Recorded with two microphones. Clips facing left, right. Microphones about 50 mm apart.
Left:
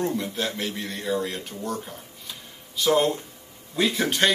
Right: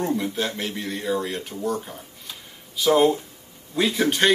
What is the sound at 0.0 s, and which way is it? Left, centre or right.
Speech, centre.